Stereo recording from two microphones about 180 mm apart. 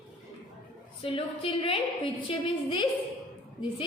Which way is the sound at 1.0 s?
30° left (ahead or behind).